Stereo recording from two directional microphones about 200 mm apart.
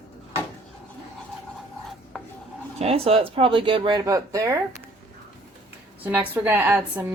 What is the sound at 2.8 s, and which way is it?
Speech, 30° right (ahead or behind).